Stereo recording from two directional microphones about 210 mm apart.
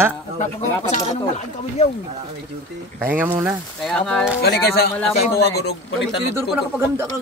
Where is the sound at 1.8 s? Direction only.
30° left (ahead or behind).